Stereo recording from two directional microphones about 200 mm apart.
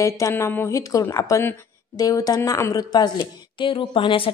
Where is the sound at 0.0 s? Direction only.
15° left (ahead or behind).